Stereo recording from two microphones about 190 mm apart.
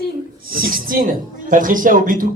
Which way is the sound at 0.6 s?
50° right (ahead or behind).